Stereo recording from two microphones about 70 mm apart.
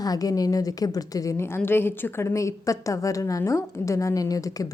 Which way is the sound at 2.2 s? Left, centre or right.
Left.